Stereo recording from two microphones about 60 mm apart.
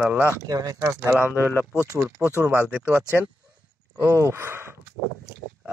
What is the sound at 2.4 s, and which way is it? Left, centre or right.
Speech, right.